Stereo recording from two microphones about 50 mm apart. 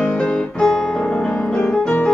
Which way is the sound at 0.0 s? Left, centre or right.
Centre.